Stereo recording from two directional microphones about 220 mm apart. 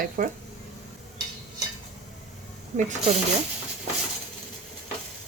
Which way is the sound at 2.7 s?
35° right (ahead or behind).